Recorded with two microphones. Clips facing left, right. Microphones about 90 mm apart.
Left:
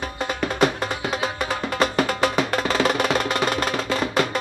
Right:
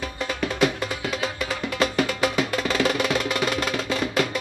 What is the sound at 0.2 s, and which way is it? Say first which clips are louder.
Music: left 2 dB; 40° left (ahead or behind).